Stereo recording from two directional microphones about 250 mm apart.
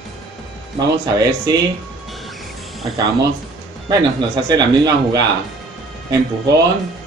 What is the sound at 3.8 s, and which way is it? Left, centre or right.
Speech, centre.